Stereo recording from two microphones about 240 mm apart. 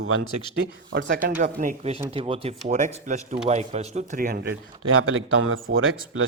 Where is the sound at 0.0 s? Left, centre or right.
Right.